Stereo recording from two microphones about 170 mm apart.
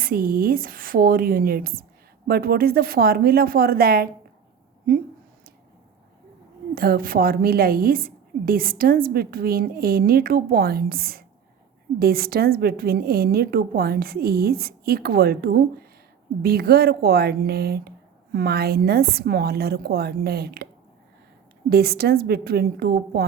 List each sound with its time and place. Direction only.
0.0 s a woman's voice: 60° right (ahead or behind)
6.7 s a woman's voice: 60° right (ahead or behind)
21.7 s a woman's voice: 65° right (ahead or behind)